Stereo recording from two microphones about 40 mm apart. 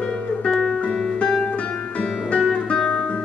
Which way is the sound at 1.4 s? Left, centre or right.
Left.